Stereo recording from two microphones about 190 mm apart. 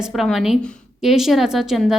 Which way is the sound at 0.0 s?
Centre (ahead or behind).